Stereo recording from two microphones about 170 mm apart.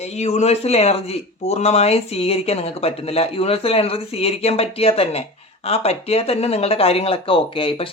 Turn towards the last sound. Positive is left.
turn(degrees=30)  # may be behind; listen again after turning